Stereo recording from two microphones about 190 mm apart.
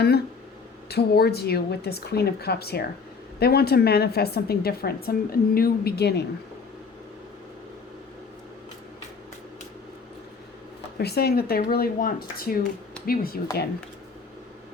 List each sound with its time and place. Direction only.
0.9 s a woman's voice: 55° left (ahead or behind)
10.9 s speech: 60° left (ahead or behind)